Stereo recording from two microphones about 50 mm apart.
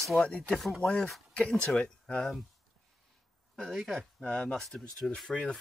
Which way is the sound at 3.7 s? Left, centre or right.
Centre.